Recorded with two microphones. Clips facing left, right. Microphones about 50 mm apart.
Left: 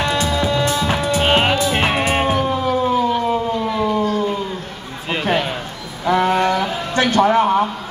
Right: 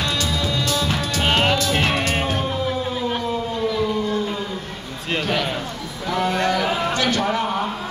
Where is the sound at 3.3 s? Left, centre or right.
Left.